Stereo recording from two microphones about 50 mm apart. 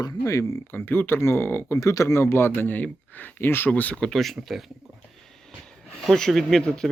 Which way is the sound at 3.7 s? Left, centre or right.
Left.